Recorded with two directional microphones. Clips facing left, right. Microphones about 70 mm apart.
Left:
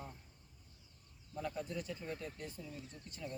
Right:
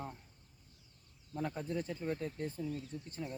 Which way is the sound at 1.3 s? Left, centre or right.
Right.